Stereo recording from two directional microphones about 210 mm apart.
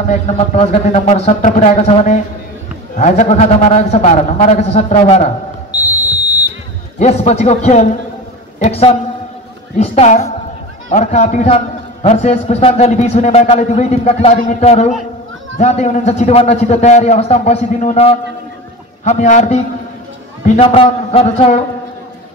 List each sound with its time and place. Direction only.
0.1 s a man's voice: 35° left (ahead or behind)
7.0 s a man's voice: 30° left (ahead or behind)